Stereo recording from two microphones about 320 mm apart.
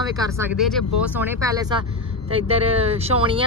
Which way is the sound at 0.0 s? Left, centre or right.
Centre.